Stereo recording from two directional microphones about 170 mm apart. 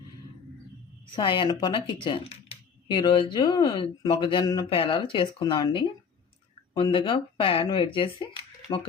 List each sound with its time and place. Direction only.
1.1 s speech: 30° left (ahead or behind)